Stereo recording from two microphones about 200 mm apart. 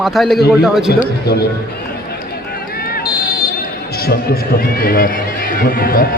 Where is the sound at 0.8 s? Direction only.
55° left (ahead or behind).